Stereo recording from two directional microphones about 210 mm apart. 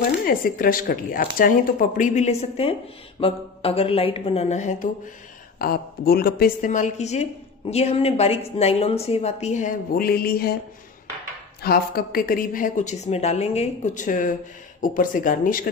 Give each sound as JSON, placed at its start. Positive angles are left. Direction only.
{"t": 0.0, "sound": "speech", "side_deg": 45}
{"t": 5.6, "sound": "speech", "side_deg": 45}
{"t": 11.6, "sound": "a woman's voice", "side_deg": 45}